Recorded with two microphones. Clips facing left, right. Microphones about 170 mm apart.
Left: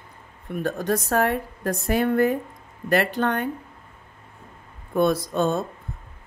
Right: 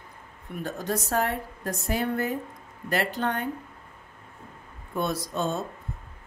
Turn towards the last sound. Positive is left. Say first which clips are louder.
# left 6 dB
turn(degrees=60)  # may be behind; listen again after turning